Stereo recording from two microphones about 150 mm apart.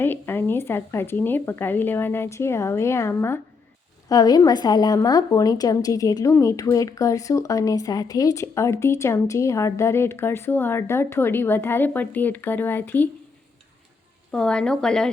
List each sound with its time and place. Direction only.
0.0 s a woman's voice: 15° left (ahead or behind)
14.3 s speech: 5° left (ahead or behind)